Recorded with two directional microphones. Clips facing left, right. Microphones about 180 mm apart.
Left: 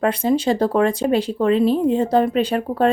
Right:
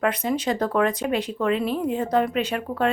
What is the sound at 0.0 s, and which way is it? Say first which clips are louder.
Speech: left 5 dB; 30° left (ahead or behind).